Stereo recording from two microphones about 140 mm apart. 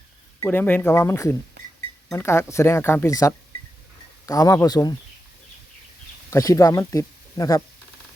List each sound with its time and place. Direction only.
0.4 s speech: 15° left (ahead or behind)
6.3 s speech: 20° left (ahead or behind)